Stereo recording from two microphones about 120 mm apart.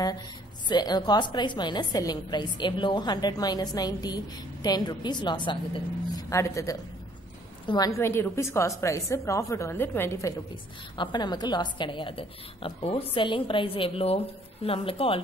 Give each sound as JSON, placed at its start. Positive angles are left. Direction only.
{"t": 0.7, "sound": "a woman's voice", "side_deg": 35}
{"t": 6.1, "sound": "a woman's voice", "side_deg": 25}
{"t": 7.6, "sound": "a woman's voice", "side_deg": 40}
{"t": 7.9, "sound": "a woman's voice", "side_deg": 20}
{"t": 11.0, "sound": "a woman's voice", "side_deg": 35}